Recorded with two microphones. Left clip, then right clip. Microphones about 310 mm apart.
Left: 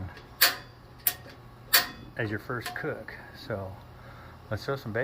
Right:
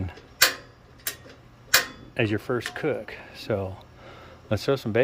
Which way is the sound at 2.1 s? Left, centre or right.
Right.